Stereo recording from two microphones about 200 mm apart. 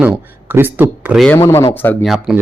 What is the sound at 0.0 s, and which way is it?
Speech, 10° right (ahead or behind).